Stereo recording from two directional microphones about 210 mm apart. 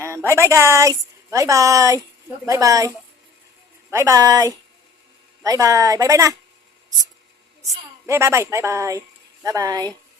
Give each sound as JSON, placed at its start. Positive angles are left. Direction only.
{"t": 0.3, "sound": "a woman's voice", "side_deg": -10}
{"t": 3.9, "sound": "a woman's voice", "side_deg": -15}
{"t": 7.7, "sound": "a woman's voice", "side_deg": -15}